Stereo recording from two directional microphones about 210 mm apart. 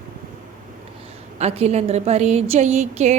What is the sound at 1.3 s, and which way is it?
A woman's voice, 30° right (ahead or behind).